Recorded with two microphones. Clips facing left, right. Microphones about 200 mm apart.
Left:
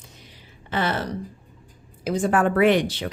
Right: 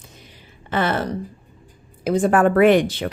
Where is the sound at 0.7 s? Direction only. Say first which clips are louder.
Right 4 dB; 55° right (ahead or behind).